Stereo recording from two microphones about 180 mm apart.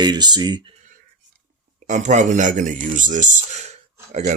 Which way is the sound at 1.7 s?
40° right (ahead or behind).